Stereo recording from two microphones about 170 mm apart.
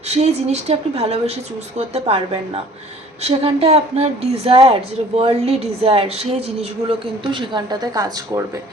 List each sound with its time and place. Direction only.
0.1 s a woman's voice: 40° right (ahead or behind)
7.3 s speech: 25° right (ahead or behind)